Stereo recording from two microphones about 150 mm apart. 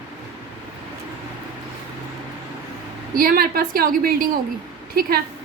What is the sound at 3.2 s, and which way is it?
A woman's voice, 75° right (ahead or behind).